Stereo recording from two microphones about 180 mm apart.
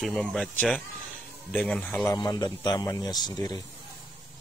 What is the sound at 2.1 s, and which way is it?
A man's voice, 20° left (ahead or behind).